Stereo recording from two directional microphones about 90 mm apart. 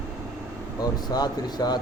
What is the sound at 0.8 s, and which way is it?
Speech, 50° left (ahead or behind).